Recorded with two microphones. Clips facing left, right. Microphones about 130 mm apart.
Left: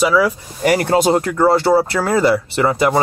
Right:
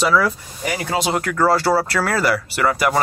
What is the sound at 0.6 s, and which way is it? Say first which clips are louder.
Speech: left 11 dB; 65° left (ahead or behind).